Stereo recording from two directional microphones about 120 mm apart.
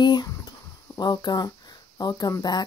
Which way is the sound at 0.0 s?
35° left (ahead or behind).